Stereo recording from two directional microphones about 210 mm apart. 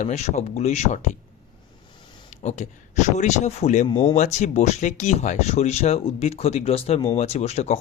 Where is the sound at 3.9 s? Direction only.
20° left (ahead or behind).